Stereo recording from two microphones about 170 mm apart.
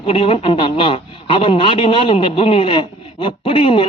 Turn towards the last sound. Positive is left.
turn(degrees=30)  # may be behind; listen again after turning